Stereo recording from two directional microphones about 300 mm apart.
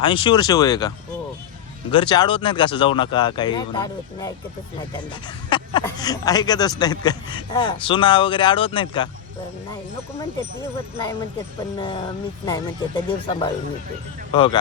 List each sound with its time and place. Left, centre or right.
0.0 s speech: centre
5.5 s speech: centre
10.9 s speech: centre